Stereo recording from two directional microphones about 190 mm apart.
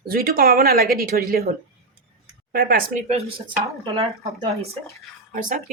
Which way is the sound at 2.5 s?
50° right (ahead or behind).